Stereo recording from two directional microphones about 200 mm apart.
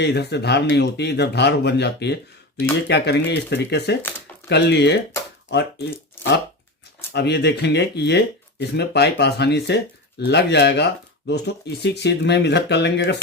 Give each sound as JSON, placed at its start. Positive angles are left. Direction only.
{"t": 0.0, "sound": "speech", "side_deg": 55}
{"t": 7.1, "sound": "speech", "side_deg": 55}